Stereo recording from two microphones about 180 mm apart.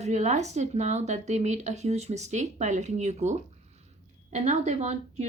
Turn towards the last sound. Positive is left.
turn(degrees=-40)  # may be behind; listen again after turning